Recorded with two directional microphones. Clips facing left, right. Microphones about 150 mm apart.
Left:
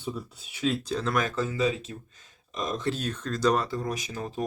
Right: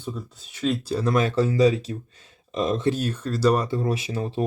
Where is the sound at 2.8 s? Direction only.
10° right (ahead or behind).